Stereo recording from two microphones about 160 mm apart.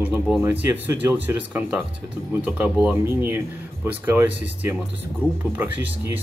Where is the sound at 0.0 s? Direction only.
10° right (ahead or behind).